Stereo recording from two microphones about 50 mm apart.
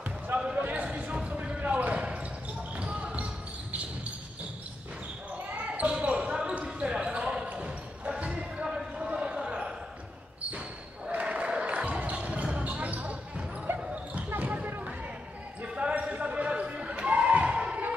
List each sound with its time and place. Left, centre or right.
0.4 s basketball bounce: centre
5.5 s basketball bounce: right
11.1 s a sound: right
11.6 s basketball bounce: right
13.7 s basketball bounce: right
14.4 s basketball bounce: right
16.9 s a sound: right